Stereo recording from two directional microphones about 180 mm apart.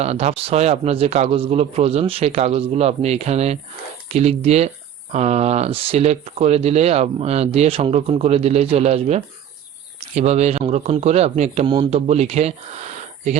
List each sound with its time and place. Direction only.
0.0 s speech: 35° right (ahead or behind)